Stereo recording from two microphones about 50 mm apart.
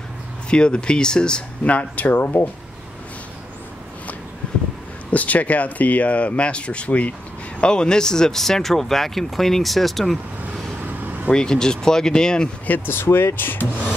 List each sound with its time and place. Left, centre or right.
0.5 s speech: centre
1.6 s speech: left
2.1 s speech: left
5.1 s speech: left
7.6 s speech: centre
11.2 s speech: centre
12.6 s speech: left